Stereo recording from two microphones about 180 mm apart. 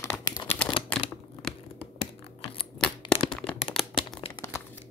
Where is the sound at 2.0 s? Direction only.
30° left (ahead or behind).